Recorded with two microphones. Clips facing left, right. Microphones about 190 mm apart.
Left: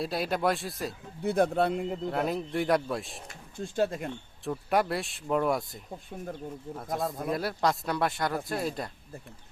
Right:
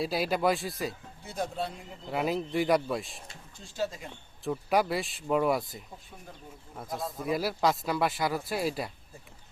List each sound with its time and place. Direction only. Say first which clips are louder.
0.0 s speech: right 1 dB; centre (ahead or behind)
1.2 s speech: left 9 dB; 60° left (ahead or behind)
2.0 s speech: right 4 dB; centre (ahead or behind)
3.6 s speech: left 6 dB; 55° left (ahead or behind)
4.4 s speech: even; centre (ahead or behind)